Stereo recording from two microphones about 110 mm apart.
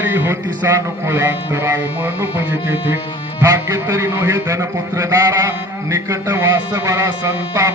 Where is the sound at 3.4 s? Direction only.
25° right (ahead or behind).